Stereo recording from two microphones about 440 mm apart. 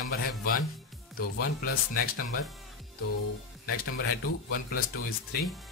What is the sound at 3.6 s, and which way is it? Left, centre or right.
A man's voice, centre.